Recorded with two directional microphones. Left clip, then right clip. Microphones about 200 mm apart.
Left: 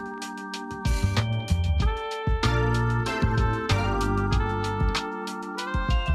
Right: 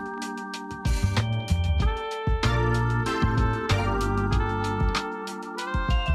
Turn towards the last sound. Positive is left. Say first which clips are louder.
# even
turn(degrees=0)  # may be behind; listen again after turning